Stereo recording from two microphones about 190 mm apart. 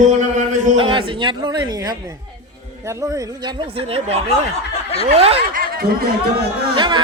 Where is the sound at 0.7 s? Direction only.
25° right (ahead or behind).